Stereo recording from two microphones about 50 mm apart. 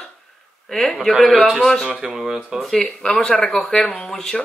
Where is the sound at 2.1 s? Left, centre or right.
Centre.